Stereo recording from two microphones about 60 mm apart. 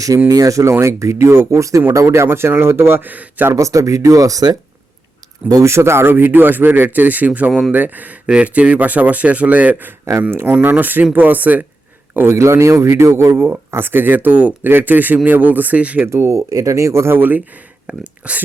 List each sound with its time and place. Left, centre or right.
0.3 s speech: right
0.7 s a man's voice: right
3.1 s speech: right
3.5 s speech: right
5.6 s speech: right
12.4 s a man's voice: right
16.0 s speech: right
17.2 s speech: right
17.8 s speech: centre